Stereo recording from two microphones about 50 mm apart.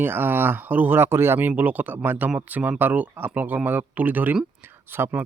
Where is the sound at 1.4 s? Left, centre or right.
Right.